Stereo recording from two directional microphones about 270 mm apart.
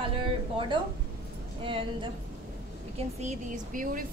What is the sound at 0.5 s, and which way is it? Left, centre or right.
A woman's voice, centre.